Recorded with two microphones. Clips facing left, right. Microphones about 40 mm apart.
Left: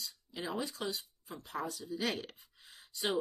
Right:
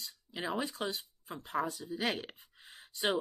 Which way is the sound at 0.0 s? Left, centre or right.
Right.